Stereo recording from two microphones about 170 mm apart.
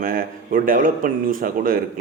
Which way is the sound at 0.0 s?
55° right (ahead or behind).